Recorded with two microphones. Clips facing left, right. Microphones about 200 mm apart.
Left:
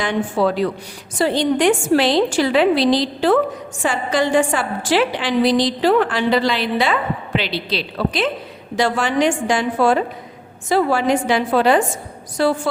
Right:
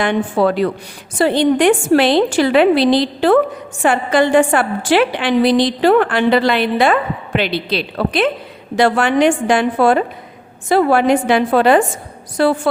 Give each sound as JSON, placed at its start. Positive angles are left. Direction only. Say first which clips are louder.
{"t": 0.0, "sound": "a woman's voice", "louder": "right 3 dB", "side_deg": -60}